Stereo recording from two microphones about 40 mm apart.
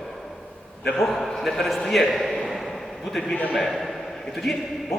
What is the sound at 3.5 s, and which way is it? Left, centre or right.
Speech, centre.